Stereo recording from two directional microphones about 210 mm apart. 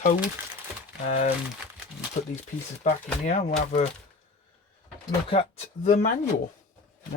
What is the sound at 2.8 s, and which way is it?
Speech, 30° left (ahead or behind).